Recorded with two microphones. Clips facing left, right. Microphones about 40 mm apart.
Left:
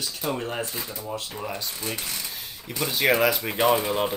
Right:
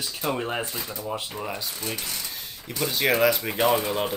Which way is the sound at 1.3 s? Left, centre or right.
Centre.